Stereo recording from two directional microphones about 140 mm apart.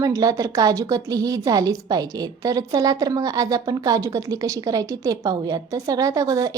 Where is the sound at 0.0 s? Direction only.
25° right (ahead or behind).